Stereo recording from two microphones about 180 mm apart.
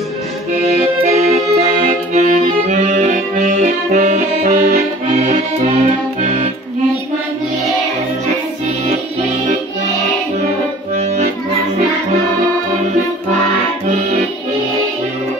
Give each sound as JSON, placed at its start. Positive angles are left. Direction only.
{"t": 0.7, "sound": "accordion", "side_deg": -40}